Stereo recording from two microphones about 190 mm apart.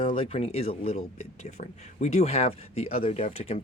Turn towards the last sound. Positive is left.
turn(degrees=30)  # may be behind; listen again after turning